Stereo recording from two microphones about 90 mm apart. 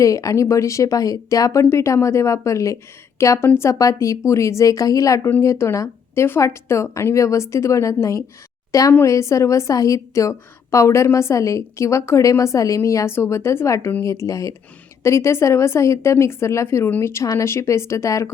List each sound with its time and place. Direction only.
0.0 s a woman's voice: 35° left (ahead or behind)